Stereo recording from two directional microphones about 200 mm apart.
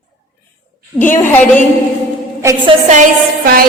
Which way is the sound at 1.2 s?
10° left (ahead or behind).